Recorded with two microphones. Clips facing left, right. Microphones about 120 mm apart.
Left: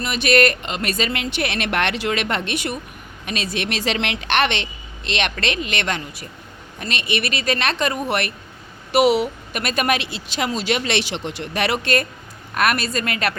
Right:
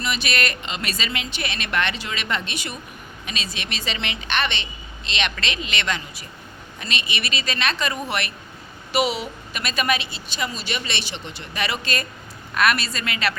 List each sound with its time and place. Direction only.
0.0 s a woman's voice: 50° left (ahead or behind)
12.5 s speech: 50° left (ahead or behind)